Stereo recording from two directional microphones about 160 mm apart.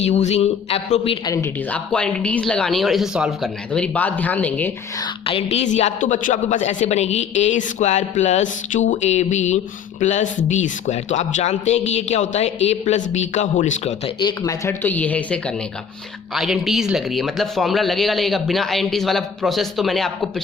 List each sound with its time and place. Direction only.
0.0 s a woman's voice: 45° left (ahead or behind)
1.7 s speech: 5° left (ahead or behind)
5.2 s a woman's voice: 40° left (ahead or behind)
14.2 s speech: 25° left (ahead or behind); by 15.5 s 10° left (ahead or behind)
16.3 s speech: centre (ahead or behind)